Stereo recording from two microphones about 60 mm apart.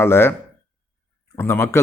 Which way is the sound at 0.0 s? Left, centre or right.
Left.